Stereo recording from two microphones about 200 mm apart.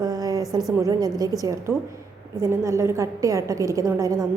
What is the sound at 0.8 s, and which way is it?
A woman's voice, 20° right (ahead or behind).